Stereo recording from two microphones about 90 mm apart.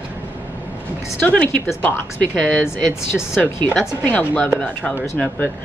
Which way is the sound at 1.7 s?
25° left (ahead or behind).